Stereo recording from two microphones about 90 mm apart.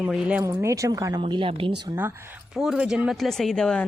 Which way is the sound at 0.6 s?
35° right (ahead or behind).